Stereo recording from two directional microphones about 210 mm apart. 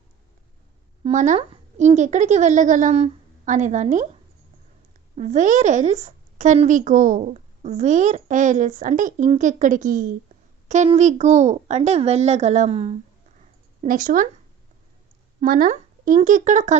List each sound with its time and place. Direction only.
1.0 s a woman's voice: 35° right (ahead or behind)
13.8 s a woman's voice: 40° right (ahead or behind)
15.4 s speech: 40° right (ahead or behind)